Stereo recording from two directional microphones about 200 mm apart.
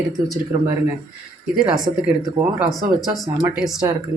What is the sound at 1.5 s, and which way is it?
Speech, centre (ahead or behind).